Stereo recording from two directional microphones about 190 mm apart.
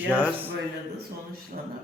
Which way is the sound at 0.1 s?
10° right (ahead or behind).